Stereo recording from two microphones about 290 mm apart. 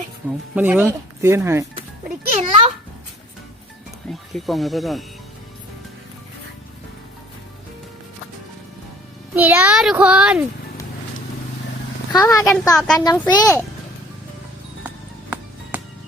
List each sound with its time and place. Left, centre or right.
0.5 s speech: centre
2.4 s music: centre
4.1 s a child's voice: centre
9.3 s a child's voice: centre
12.1 s a woman's voice: centre
13.1 s a woman's voice: centre
14.8 s music: centre